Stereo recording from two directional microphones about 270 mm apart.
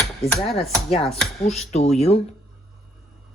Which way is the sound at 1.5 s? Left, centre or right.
Left.